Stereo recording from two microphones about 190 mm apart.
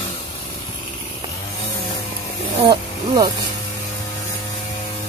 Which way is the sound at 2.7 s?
20° right (ahead or behind).